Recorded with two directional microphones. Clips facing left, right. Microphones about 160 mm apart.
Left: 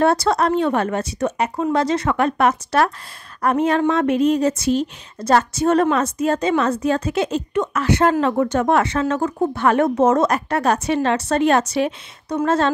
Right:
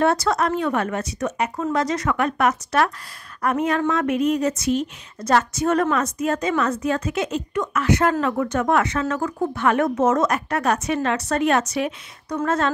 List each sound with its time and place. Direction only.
0.0 s speech: 30° left (ahead or behind)